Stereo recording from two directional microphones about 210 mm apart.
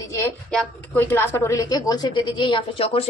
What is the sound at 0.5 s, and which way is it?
A woman's voice, 5° left (ahead or behind).